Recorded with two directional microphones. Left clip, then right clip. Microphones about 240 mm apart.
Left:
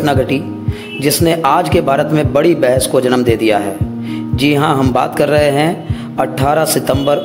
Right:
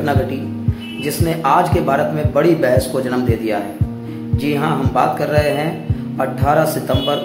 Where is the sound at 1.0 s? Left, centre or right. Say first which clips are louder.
Left 6 dB; left.